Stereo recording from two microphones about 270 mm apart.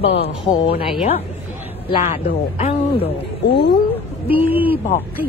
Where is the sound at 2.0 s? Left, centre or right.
Left.